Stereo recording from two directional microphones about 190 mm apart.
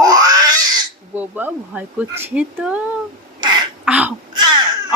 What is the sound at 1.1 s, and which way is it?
Speech, 10° right (ahead or behind).